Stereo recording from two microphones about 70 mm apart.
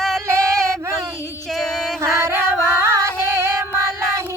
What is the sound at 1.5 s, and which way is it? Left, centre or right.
Music, centre.